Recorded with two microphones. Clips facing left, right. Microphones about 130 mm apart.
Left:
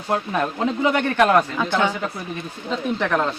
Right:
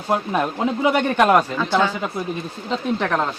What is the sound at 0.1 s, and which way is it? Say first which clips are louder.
Speech: right 2 dB; 20° right (ahead or behind).